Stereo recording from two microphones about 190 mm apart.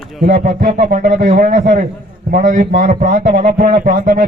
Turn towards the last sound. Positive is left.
turn(degrees=-45)  # may be behind; listen again after turning